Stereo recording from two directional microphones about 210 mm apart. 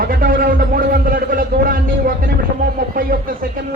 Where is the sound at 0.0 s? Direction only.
45° right (ahead or behind).